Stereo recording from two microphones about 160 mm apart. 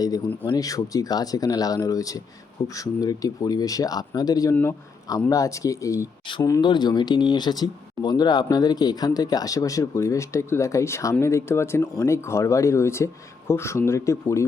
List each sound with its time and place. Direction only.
0.4 s speech: 25° left (ahead or behind)